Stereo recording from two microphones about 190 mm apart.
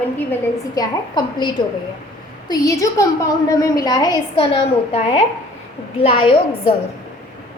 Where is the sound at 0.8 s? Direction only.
20° left (ahead or behind).